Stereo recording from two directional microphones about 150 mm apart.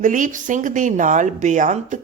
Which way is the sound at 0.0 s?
60° right (ahead or behind).